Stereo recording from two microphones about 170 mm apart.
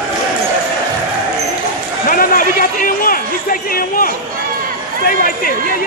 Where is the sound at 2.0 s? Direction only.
55° left (ahead or behind).